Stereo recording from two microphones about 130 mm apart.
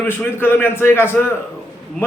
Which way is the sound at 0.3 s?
15° left (ahead or behind).